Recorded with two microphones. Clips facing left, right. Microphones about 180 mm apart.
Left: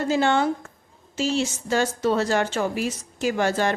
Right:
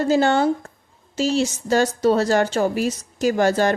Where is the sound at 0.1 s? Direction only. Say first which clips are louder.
Right 3 dB; 40° right (ahead or behind).